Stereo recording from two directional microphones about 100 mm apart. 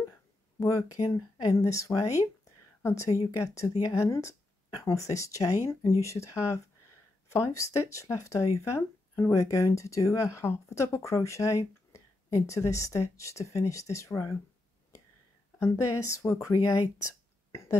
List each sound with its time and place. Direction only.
0.6 s speech: 35° left (ahead or behind)
15.6 s speech: 30° left (ahead or behind)
17.5 s throat clearing: 30° left (ahead or behind)